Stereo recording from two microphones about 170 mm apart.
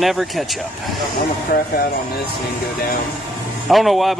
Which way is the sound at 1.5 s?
55° left (ahead or behind).